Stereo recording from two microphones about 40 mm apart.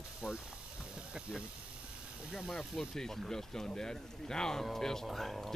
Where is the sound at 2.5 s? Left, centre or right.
Centre.